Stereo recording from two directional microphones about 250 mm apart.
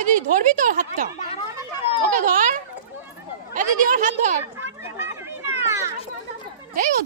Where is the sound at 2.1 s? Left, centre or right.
Right.